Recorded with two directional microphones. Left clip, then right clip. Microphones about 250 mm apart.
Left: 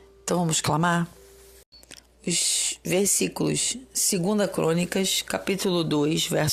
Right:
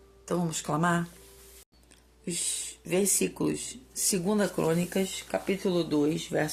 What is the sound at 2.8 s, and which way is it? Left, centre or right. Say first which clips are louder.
Speech: left 2 dB; left.